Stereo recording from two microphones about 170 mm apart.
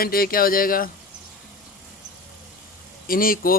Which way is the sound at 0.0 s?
60° left (ahead or behind).